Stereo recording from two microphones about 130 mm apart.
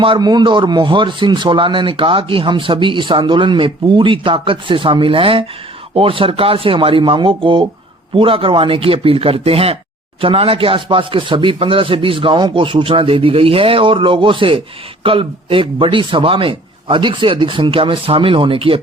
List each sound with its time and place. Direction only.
0.0 s speech: 35° right (ahead or behind)